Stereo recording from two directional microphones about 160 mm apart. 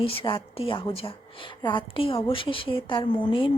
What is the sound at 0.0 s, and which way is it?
A woman's voice, 35° left (ahead or behind).